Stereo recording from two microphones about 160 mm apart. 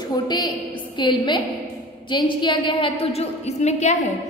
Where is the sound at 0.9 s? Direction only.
30° left (ahead or behind).